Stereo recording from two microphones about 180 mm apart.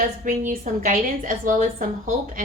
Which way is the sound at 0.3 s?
45° right (ahead or behind).